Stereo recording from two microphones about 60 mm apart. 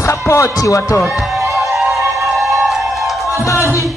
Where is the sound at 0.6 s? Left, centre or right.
Left.